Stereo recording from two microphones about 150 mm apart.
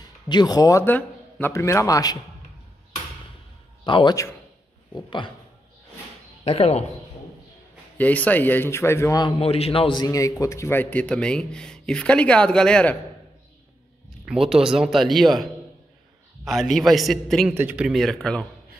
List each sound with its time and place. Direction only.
0.0 s a man's voice: 30° left (ahead or behind)
3.8 s a man's voice: 30° left (ahead or behind)
6.4 s speech: 45° left (ahead or behind)
8.0 s a man's voice: 10° left (ahead or behind)
9.4 s a man's voice: 40° left (ahead or behind); by 12.9 s 5° left (ahead or behind)
14.2 s speech: 5° right (ahead or behind)
16.4 s speech: centre (ahead or behind)
17.6 s speech: 10° right (ahead or behind); by 18.5 s 5° left (ahead or behind)